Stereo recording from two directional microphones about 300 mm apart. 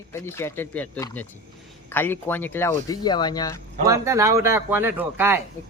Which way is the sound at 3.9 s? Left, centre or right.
Centre.